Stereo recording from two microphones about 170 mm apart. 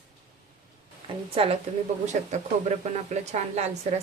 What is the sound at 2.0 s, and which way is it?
Speech, 45° right (ahead or behind).